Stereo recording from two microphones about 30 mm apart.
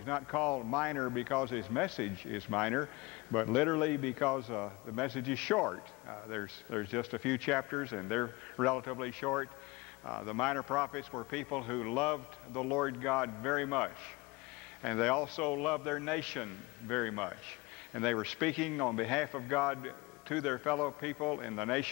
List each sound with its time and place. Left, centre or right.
0.1 s a man's voice: centre
6.0 s speech: centre
6.3 s a man's voice: centre